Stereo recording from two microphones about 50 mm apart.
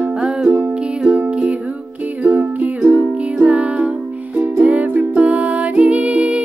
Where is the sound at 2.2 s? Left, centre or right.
Right.